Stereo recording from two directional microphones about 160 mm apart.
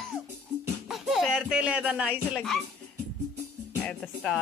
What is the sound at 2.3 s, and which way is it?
Speech, centre (ahead or behind).